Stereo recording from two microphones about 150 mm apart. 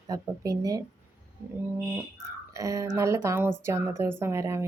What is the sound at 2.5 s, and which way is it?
Speech, 20° right (ahead or behind).